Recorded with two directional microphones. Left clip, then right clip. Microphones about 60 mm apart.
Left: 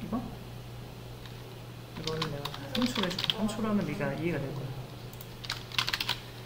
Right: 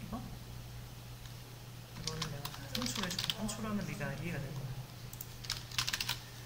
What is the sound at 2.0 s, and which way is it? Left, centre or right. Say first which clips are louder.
Typing: left 8 dB; centre.